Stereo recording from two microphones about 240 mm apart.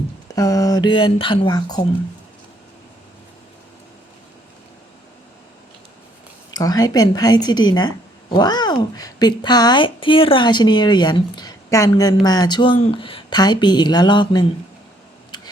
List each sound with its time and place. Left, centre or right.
0.3 s speech: centre
6.5 s speech: centre
15.3 s tick: centre